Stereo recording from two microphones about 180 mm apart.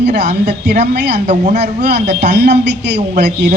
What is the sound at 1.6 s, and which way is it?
Speech, 70° right (ahead or behind).